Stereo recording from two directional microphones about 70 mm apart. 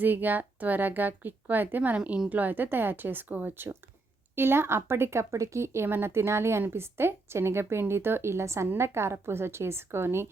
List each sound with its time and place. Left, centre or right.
0.0 s speech: right
2.0 s speech: centre
2.4 s speech: right